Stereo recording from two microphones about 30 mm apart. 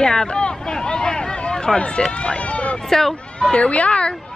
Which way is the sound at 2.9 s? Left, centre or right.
Centre.